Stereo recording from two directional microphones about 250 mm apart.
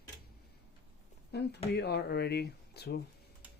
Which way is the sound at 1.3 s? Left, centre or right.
Left.